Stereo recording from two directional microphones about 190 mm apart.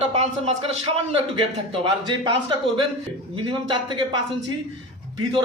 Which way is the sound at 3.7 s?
25° right (ahead or behind).